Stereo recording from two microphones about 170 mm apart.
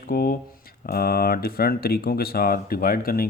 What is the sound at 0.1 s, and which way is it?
Speech, 60° left (ahead or behind).